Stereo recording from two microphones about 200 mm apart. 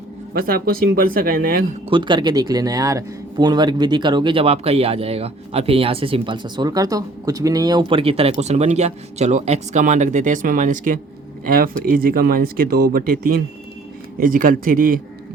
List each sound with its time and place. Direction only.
0.3 s speech: 50° right (ahead or behind)
1.9 s speech: 25° right (ahead or behind); by 15.0 s 45° right (ahead or behind)